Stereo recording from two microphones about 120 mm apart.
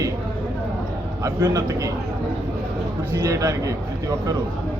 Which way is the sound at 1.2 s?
30° right (ahead or behind).